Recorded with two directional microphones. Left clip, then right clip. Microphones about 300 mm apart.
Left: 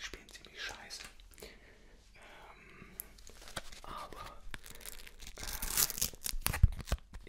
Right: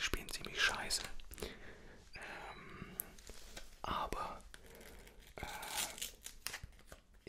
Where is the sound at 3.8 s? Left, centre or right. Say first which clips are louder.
Right 6 dB; right.